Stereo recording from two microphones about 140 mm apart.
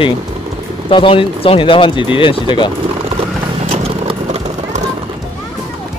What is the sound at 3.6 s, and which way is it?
Horse, 45° right (ahead or behind).